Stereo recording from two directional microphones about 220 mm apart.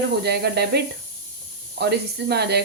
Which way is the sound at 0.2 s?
45° right (ahead or behind).